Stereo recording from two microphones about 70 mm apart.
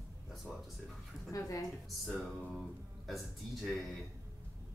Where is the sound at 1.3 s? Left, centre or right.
Left.